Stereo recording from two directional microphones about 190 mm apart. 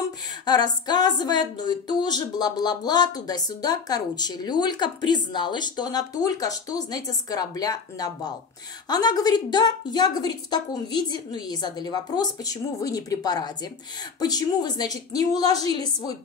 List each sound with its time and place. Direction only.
0.5 s speech: 20° left (ahead or behind)